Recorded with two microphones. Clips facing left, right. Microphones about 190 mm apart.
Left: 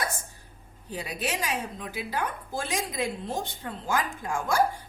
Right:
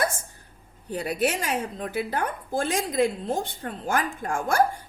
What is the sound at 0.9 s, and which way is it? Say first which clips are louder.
A woman's voice: right 7 dB; 55° right (ahead or behind).